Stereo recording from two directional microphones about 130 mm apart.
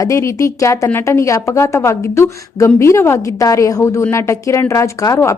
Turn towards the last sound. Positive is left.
turn(degrees=25)  # may be behind; listen again after turning